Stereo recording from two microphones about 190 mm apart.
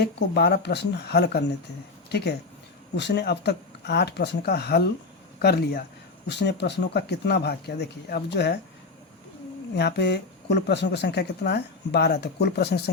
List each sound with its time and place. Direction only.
0.0 s speech: 60° left (ahead or behind)
2.9 s speech: 65° left (ahead or behind)
9.7 s speech: 60° left (ahead or behind)